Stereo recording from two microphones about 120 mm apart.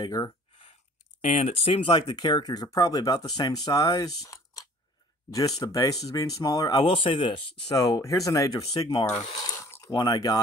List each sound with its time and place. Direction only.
0.0 s speech: 30° left (ahead or behind)
1.2 s speech: 60° left (ahead or behind); by 6.8 s 30° left (ahead or behind)
6.8 s speech: 45° left (ahead or behind)
7.7 s speech: 30° left (ahead or behind)
9.5 s a sound: 25° left (ahead or behind)
9.9 s speech: 35° left (ahead or behind)